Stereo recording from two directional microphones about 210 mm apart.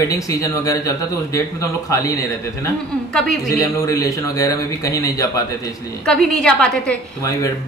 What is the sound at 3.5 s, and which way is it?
A man's voice, 15° left (ahead or behind).